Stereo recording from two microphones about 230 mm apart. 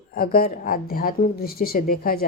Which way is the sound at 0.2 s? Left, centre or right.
Left.